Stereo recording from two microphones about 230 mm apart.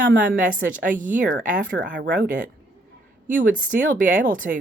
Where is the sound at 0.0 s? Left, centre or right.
Right.